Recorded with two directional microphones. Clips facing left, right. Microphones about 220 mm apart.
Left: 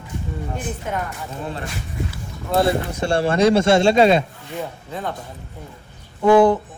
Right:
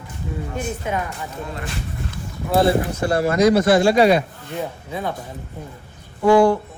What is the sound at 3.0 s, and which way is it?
Speech, 30° left (ahead or behind).